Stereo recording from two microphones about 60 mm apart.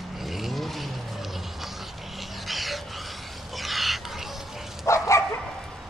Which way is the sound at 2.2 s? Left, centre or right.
Centre.